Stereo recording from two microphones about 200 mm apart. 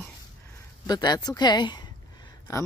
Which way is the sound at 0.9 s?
20° left (ahead or behind).